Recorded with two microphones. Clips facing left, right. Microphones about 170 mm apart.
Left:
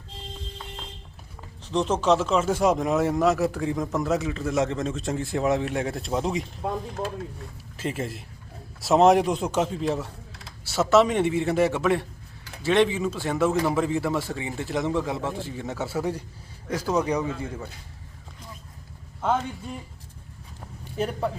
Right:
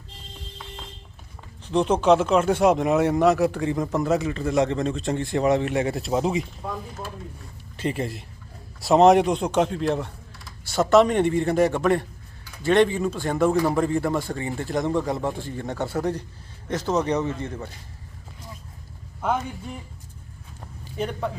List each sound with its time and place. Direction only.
1.9 s speech: centre (ahead or behind)
7.8 s speech: centre (ahead or behind)
19.2 s speech: 15° right (ahead or behind)
21.0 s speech: 5° left (ahead or behind)